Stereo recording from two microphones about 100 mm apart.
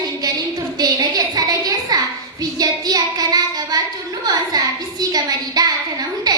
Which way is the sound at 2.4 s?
40° right (ahead or behind).